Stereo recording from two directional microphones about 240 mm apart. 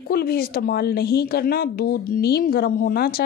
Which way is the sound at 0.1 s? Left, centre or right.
Left.